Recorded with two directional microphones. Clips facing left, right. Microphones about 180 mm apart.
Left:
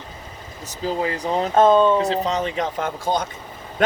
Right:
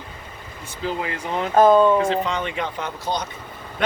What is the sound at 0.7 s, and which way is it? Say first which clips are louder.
Speech: left 3 dB; 35° left (ahead or behind).